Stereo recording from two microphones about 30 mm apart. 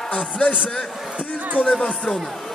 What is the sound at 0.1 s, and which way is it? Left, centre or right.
Speech, left.